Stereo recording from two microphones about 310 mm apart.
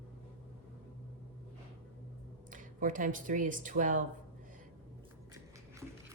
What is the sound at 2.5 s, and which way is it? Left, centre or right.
Speech, right.